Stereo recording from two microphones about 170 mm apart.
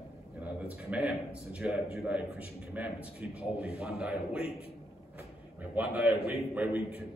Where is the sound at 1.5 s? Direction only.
5° right (ahead or behind).